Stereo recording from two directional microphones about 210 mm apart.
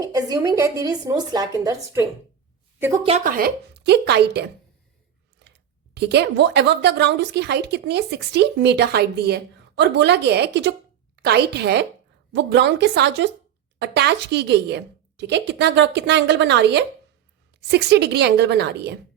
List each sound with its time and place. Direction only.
0.1 s speech: 15° right (ahead or behind)
3.2 s a woman's voice: 45° right (ahead or behind)